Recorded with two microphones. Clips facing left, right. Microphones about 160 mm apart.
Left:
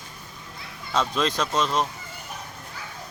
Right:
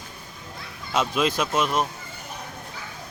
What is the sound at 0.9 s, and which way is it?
Speech, 10° right (ahead or behind).